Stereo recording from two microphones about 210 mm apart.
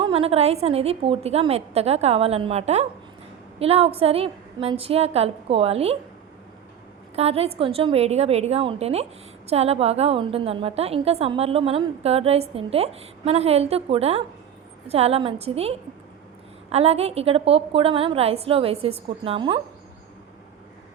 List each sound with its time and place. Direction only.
0.0 s a woman's voice: 25° right (ahead or behind)
7.2 s a woman's voice: 30° right (ahead or behind)